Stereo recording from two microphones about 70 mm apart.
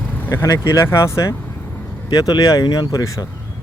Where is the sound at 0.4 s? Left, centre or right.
Left.